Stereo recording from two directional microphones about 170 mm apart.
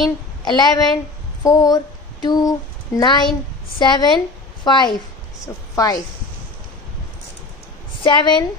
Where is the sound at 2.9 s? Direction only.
25° left (ahead or behind).